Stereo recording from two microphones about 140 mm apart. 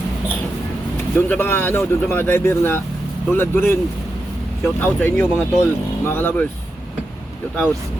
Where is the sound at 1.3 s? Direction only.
15° left (ahead or behind).